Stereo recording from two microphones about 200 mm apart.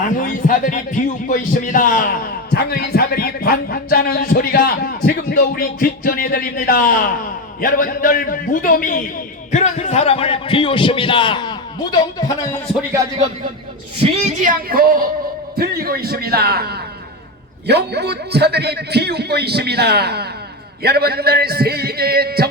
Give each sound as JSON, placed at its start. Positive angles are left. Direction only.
{"t": 0.2, "sound": "a man's voice", "side_deg": 40}
{"t": 14.0, "sound": "a man's voice", "side_deg": -40}